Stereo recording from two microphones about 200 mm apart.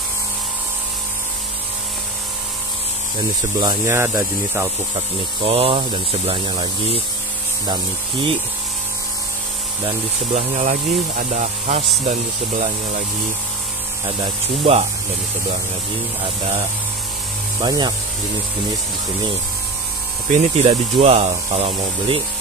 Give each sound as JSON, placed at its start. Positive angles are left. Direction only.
{"t": 3.5, "sound": "speech", "side_deg": -15}
{"t": 4.9, "sound": "speech", "side_deg": -30}
{"t": 9.8, "sound": "speech", "side_deg": -35}
{"t": 14.2, "sound": "speech", "side_deg": -30}
{"t": 17.6, "sound": "speech", "side_deg": -20}
{"t": 20.2, "sound": "speech", "side_deg": -35}